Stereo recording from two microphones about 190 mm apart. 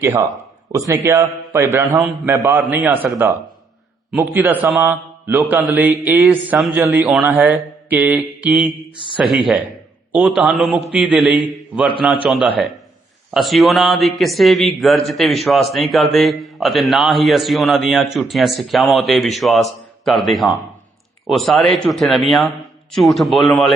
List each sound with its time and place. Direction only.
0.0 s a man's voice: 15° right (ahead or behind)
4.6 s a man's voice: 10° right (ahead or behind)
5.4 s a man's voice: centre (ahead or behind)